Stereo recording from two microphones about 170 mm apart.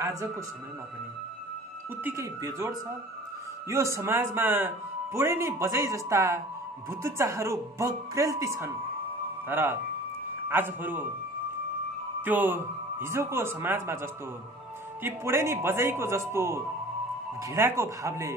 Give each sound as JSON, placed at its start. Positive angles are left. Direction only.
{"t": 2.0, "sound": "speech", "side_deg": -15}
{"t": 12.2, "sound": "speech", "side_deg": -10}